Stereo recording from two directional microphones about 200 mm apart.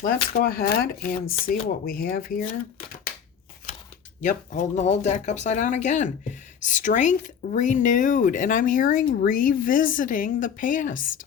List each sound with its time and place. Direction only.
0.0 s speech: 45° left (ahead or behind)
4.2 s speech: 40° left (ahead or behind)